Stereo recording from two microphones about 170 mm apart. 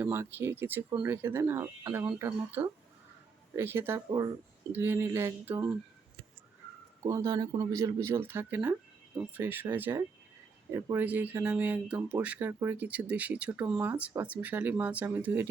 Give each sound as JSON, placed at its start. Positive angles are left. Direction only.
{"t": 0.0, "sound": "speech", "side_deg": -15}
{"t": 7.0, "sound": "speech", "side_deg": -20}